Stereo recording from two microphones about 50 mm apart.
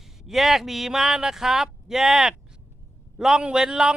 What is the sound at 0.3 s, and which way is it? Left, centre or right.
A man's voice, centre.